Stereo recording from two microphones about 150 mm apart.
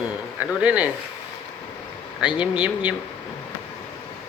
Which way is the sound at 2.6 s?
10° right (ahead or behind).